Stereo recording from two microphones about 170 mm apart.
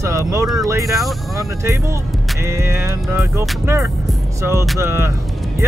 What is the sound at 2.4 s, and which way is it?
Speech, 15° right (ahead or behind).